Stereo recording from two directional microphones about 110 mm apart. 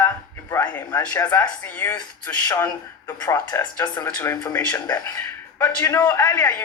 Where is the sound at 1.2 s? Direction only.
35° left (ahead or behind).